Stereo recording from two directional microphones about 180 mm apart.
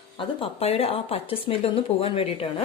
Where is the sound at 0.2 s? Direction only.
30° left (ahead or behind).